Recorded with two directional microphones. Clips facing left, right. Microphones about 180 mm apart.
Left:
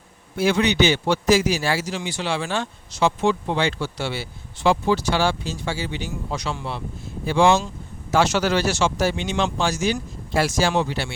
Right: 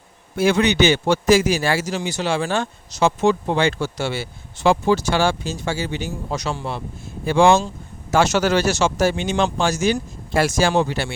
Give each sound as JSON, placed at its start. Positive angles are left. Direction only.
{"t": 0.3, "sound": "a man's voice", "side_deg": -50}